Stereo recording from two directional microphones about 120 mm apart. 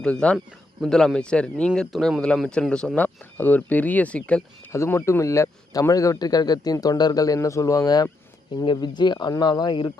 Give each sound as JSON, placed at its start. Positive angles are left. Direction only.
{"t": 0.0, "sound": "speech", "side_deg": 10}
{"t": 4.7, "sound": "speech", "side_deg": 20}